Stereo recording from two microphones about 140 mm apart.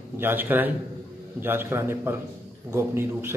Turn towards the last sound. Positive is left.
turn(degrees=-15)  # may be behind; listen again after turning